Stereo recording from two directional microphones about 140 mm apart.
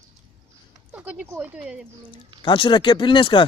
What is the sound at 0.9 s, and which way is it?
Speech, 10° right (ahead or behind).